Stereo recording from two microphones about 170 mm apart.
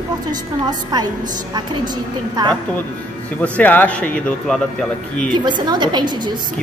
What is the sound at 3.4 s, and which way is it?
Speech, 10° left (ahead or behind).